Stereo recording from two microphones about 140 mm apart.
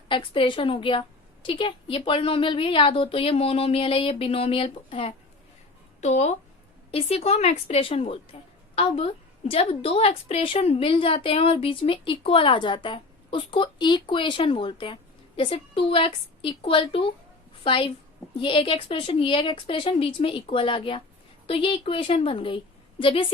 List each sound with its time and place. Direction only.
0.1 s speech: 35° left (ahead or behind)
6.0 s a woman's voice: 55° left (ahead or behind)